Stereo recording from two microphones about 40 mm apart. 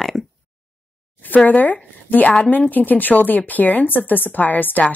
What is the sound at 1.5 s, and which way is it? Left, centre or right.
Speech, left.